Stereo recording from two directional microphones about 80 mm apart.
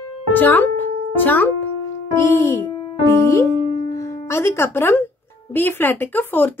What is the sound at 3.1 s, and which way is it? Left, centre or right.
Speech, left.